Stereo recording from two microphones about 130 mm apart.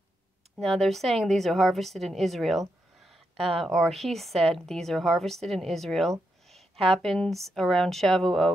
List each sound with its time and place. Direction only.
0.6 s a woman's voice: centre (ahead or behind)
6.4 s a sound: centre (ahead or behind)
6.9 s a woman's voice: 5° left (ahead or behind)